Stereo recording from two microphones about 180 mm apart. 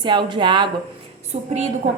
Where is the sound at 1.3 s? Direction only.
40° right (ahead or behind).